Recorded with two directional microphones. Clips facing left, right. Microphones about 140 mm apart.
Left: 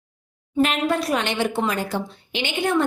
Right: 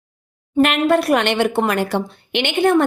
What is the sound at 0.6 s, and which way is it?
A woman's voice, 65° right (ahead or behind).